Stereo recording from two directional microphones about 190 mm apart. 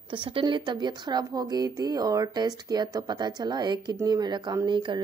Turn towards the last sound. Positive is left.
turn(degrees=-25)  # may be behind; listen again after turning